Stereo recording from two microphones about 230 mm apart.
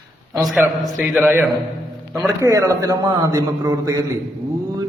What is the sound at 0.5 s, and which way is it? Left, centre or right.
A man's voice, centre.